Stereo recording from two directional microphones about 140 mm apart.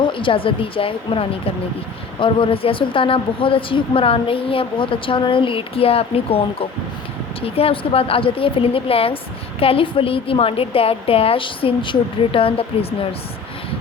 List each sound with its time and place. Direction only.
0.0 s a woman's voice: 35° left (ahead or behind)